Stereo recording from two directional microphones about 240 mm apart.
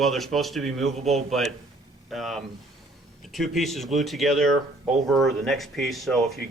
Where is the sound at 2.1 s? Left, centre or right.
Centre.